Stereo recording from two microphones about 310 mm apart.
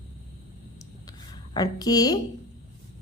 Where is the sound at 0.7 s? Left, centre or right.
Centre.